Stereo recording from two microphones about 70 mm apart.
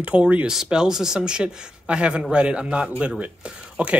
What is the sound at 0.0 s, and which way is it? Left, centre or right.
Speech, centre.